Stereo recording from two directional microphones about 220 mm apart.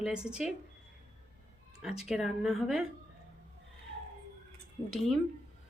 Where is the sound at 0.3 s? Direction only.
5° right (ahead or behind).